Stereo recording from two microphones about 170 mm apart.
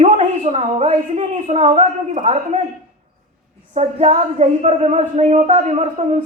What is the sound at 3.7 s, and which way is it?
Speech, 40° right (ahead or behind).